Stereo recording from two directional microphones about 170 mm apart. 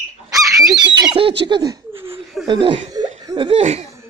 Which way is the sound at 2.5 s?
30° right (ahead or behind).